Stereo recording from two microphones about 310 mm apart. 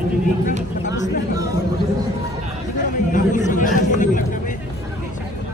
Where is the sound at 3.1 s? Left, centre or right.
Left.